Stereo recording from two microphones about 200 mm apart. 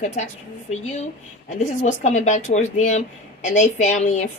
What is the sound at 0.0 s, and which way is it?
A woman's voice, 35° left (ahead or behind).